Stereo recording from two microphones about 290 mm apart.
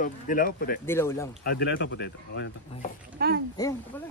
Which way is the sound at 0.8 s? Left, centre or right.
Centre.